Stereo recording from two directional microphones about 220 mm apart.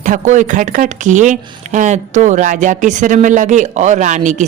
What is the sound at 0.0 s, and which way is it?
Speech, 35° right (ahead or behind).